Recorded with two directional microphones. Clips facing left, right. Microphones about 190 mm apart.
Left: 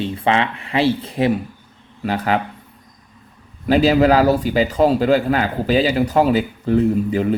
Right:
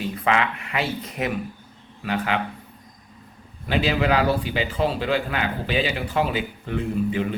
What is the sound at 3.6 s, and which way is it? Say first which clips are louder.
A man's voice: left 9 dB; 40° left (ahead or behind).